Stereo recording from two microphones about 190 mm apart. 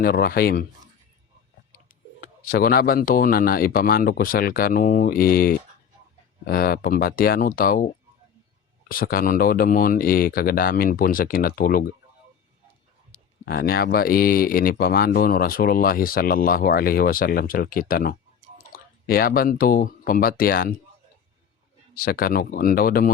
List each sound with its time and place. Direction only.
0.0 s speech: 50° left (ahead or behind)
2.4 s speech: 50° left (ahead or behind)
8.9 s speech: 50° left (ahead or behind)
13.4 s speech: 55° left (ahead or behind)
21.9 s speech: 50° left (ahead or behind)